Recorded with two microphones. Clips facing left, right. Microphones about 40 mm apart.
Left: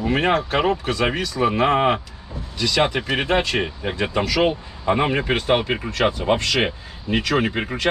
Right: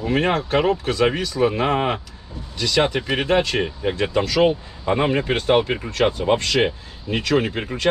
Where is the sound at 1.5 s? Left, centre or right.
Centre.